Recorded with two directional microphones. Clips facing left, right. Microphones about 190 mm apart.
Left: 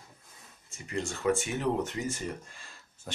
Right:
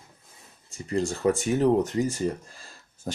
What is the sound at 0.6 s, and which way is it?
Speech, 35° right (ahead or behind).